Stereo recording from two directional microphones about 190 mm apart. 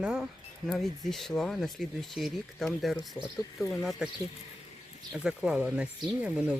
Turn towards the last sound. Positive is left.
turn(degrees=-5)  # may be behind; listen again after turning